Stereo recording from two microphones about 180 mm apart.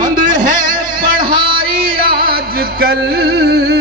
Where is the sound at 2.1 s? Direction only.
55° right (ahead or behind).